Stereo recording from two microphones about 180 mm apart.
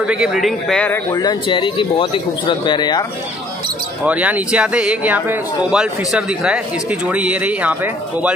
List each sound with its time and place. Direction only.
0.0 s a man's voice: 5° right (ahead or behind)
1.1 s speech: 25° left (ahead or behind)
4.0 s speech: 10° right (ahead or behind)